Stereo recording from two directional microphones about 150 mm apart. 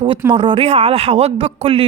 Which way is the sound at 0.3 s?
35° right (ahead or behind).